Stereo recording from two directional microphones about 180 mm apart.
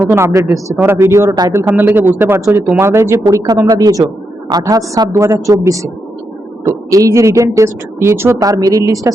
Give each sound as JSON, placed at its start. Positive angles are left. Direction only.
{"t": 0.0, "sound": "a woman's voice", "side_deg": -15}